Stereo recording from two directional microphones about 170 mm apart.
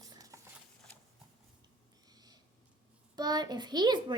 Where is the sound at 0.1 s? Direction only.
20° right (ahead or behind).